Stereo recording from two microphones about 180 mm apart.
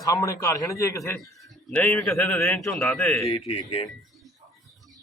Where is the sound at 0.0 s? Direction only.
15° left (ahead or behind).